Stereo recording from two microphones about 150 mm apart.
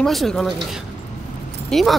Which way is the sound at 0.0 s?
Centre (ahead or behind).